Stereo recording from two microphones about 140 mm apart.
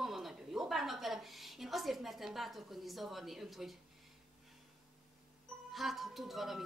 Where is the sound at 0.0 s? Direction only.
Centre (ahead or behind).